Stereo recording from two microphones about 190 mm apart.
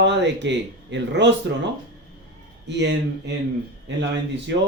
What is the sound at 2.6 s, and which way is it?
Speech, 65° right (ahead or behind).